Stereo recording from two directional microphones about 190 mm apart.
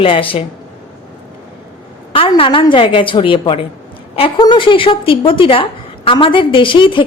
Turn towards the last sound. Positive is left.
turn(degrees=25)  # may be behind; listen again after turning